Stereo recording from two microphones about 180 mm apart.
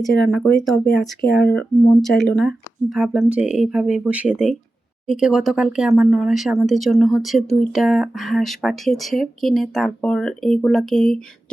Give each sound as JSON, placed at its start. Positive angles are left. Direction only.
{"t": 0.3, "sound": "speech", "side_deg": 0}
{"t": 1.3, "sound": "speech", "side_deg": 65}
{"t": 1.5, "sound": "speech", "side_deg": 0}